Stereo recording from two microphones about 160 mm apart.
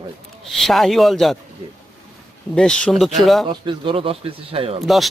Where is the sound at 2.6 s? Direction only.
5° left (ahead or behind).